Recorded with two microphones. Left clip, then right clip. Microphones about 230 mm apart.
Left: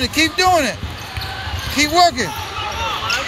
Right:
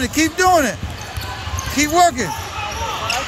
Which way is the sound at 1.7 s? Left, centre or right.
Centre.